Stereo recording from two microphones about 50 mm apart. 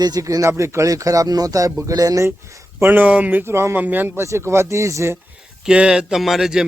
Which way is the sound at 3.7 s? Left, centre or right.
Right.